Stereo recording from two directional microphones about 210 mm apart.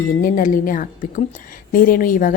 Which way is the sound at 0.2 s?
40° left (ahead or behind).